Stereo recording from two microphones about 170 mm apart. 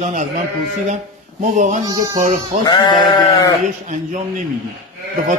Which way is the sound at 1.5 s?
45° right (ahead or behind).